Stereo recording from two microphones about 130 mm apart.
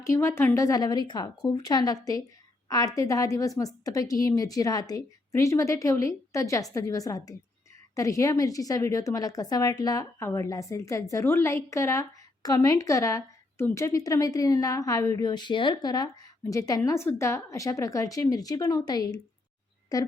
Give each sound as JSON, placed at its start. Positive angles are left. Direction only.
{"t": 0.0, "sound": "a woman's voice", "side_deg": 20}